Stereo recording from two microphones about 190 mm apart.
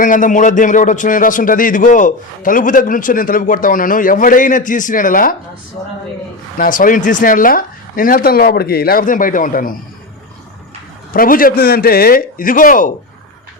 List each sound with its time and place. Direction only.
0.0 s a man's voice: 45° left (ahead or behind)
6.6 s a man's voice: 45° left (ahead or behind)
11.1 s a man's voice: 50° left (ahead or behind)